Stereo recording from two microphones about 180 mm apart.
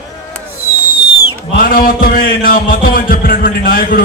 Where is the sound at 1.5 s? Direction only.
55° left (ahead or behind).